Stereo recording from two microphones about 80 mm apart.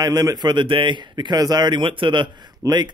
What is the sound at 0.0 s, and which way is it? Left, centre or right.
A man's voice, right.